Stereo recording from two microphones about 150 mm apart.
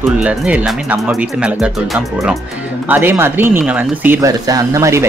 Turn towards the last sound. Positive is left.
turn(degrees=-20)  # may be behind; listen again after turning